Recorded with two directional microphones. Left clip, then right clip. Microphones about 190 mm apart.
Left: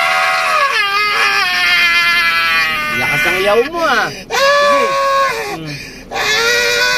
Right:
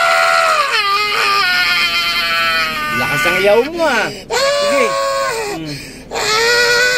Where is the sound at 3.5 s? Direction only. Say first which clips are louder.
Even; 20° right (ahead or behind).